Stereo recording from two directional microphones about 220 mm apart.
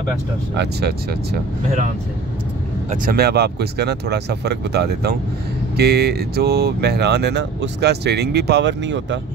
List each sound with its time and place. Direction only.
0.6 s speech: 50° right (ahead or behind)
2.9 s speech: 45° right (ahead or behind)